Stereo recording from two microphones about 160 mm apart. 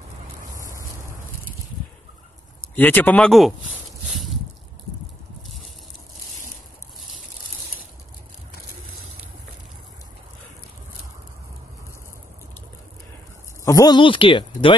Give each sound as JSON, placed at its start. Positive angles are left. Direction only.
{"t": 2.7, "sound": "speech", "side_deg": 10}
{"t": 13.7, "sound": "speech", "side_deg": 25}